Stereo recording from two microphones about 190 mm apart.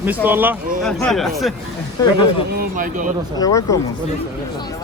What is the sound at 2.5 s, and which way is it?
Speech, 50° right (ahead or behind).